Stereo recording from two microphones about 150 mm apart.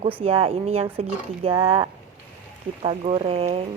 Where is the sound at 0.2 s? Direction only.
40° right (ahead or behind).